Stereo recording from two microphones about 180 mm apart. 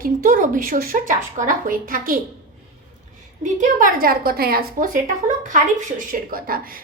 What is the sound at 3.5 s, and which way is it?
A woman's voice, 50° right (ahead or behind).